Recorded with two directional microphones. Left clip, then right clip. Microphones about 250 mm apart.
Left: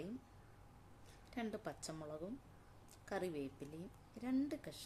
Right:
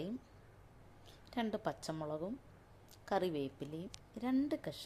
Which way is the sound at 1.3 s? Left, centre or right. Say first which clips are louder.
Right 7 dB; centre.